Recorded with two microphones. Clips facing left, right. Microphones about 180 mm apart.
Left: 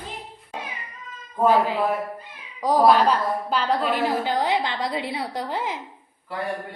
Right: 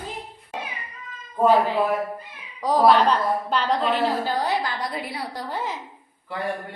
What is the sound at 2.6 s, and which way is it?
A woman's voice, 10° left (ahead or behind).